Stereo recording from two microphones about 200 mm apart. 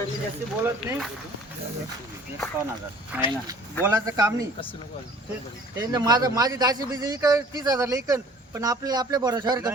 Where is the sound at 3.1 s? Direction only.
10° right (ahead or behind).